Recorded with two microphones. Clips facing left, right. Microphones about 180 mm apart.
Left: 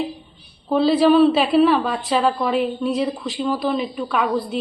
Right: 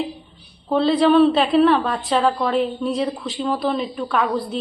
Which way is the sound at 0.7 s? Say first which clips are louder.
Left 1 dB; 5° left (ahead or behind).